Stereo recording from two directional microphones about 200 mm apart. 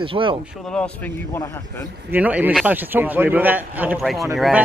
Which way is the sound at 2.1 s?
10° right (ahead or behind).